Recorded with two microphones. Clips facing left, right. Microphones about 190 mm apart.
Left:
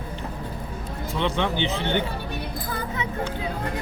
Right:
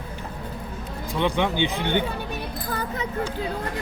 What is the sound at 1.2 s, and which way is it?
Speech, 15° right (ahead or behind).